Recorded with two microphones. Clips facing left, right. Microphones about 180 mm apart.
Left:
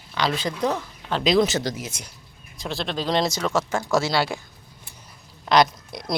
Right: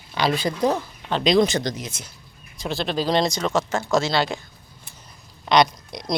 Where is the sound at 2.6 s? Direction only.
Centre (ahead or behind).